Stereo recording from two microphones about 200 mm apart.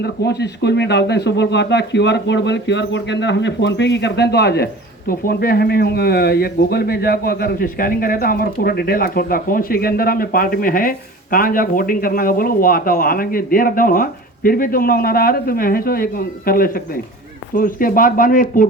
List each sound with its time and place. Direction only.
0.0 s speech: 55° left (ahead or behind)